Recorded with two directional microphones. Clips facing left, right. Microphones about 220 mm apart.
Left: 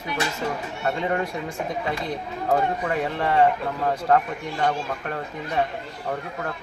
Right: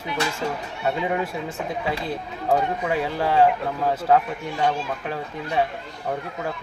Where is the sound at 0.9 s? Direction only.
5° right (ahead or behind).